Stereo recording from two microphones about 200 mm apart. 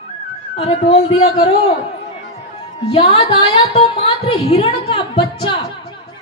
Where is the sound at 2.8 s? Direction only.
30° left (ahead or behind).